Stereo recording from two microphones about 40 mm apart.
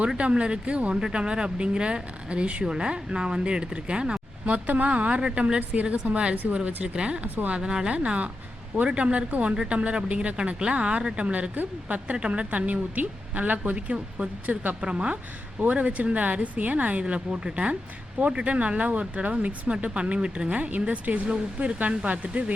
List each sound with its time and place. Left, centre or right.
0.2 s speech: right
4.4 s a woman's voice: right